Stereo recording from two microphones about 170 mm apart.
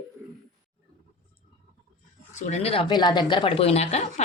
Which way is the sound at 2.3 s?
40° left (ahead or behind).